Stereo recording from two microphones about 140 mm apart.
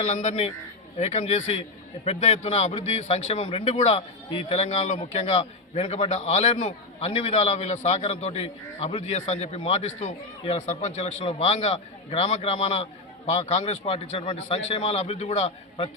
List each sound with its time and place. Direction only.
0.1 s a man's voice: 50° left (ahead or behind)
6.1 s a man's voice: 55° left (ahead or behind)